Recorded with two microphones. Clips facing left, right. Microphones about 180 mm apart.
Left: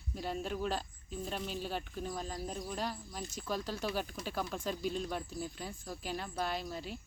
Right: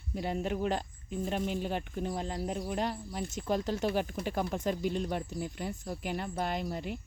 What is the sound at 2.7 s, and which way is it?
Speech, 60° right (ahead or behind).